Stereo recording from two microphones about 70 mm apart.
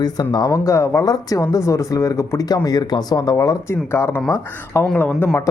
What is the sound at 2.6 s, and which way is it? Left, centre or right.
Speech, left.